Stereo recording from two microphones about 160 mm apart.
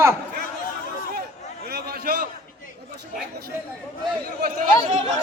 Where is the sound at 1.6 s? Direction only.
75° right (ahead or behind).